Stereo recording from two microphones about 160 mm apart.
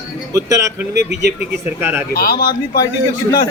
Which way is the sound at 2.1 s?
70° left (ahead or behind).